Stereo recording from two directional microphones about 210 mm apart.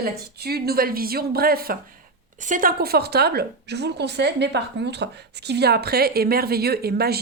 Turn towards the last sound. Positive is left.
turn(degrees=-50)  # may be behind; listen again after turning